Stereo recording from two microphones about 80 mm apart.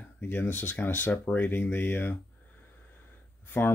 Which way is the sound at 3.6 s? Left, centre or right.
Left.